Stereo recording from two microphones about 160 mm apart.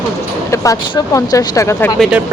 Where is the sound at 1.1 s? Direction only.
20° left (ahead or behind).